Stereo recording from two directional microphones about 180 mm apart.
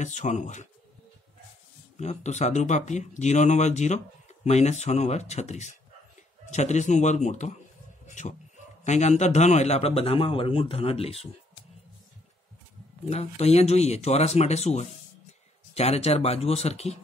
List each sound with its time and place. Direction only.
0.0 s speech: 40° left (ahead or behind)
2.0 s speech: 40° left (ahead or behind)
13.1 s speech: 35° left (ahead or behind)